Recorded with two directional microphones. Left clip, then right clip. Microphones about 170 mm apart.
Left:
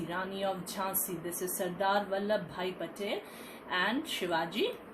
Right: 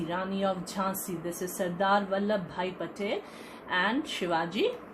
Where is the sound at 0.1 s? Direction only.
40° right (ahead or behind).